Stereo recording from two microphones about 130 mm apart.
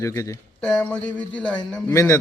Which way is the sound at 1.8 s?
20° left (ahead or behind).